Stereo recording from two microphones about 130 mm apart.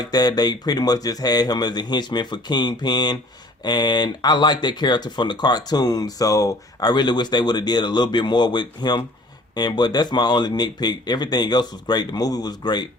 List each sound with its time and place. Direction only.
0.0 s speech: 30° left (ahead or behind)